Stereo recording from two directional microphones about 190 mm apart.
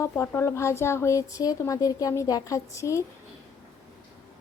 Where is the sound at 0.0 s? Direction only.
15° left (ahead or behind).